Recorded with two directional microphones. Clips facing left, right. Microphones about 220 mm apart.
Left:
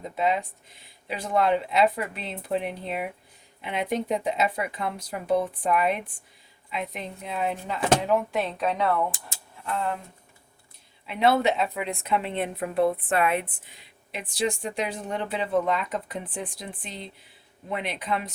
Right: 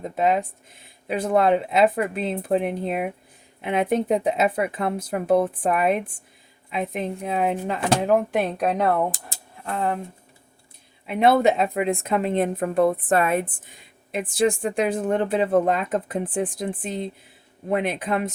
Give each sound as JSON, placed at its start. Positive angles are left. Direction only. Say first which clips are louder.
{"t": 0.0, "sound": "a woman's voice", "louder": "right 4 dB", "side_deg": -50}
{"t": 11.0, "sound": "a woman's voice", "louder": "right 4 dB", "side_deg": -50}